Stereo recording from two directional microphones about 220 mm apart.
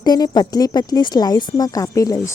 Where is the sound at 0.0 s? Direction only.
20° left (ahead or behind).